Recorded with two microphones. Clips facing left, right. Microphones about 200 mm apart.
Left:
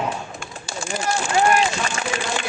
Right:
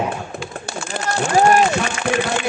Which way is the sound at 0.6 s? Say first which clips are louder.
Left 2 dB; 60° right (ahead or behind).